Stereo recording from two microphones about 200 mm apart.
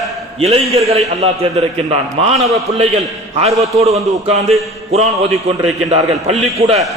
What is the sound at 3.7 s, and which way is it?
Speech, 30° right (ahead or behind).